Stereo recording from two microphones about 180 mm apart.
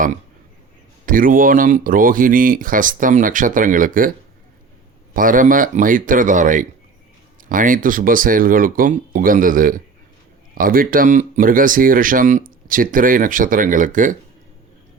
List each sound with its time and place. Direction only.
1.0 s speech: 50° right (ahead or behind)
5.1 s speech: 50° right (ahead or behind)